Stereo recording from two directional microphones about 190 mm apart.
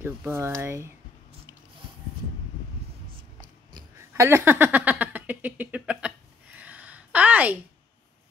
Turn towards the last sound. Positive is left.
turn(degrees=-10)  # may be behind; listen again after turning